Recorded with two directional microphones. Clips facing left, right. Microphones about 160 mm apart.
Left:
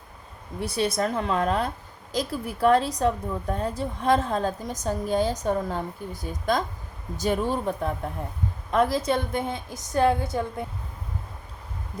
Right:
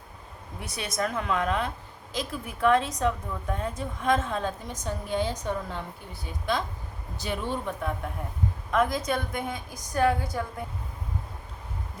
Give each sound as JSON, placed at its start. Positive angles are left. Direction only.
{"t": 0.6, "sound": "a woman's voice", "side_deg": 30}